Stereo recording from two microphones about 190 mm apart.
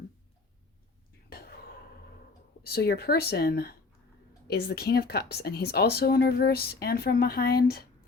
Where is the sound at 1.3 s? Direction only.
55° left (ahead or behind).